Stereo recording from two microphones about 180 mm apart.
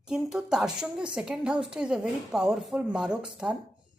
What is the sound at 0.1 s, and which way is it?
A woman's voice, 5° right (ahead or behind).